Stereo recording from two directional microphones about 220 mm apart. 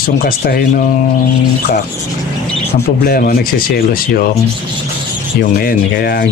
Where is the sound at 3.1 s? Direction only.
40° left (ahead or behind).